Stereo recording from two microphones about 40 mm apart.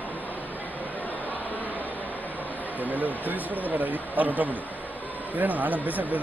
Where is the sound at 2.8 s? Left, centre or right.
Right.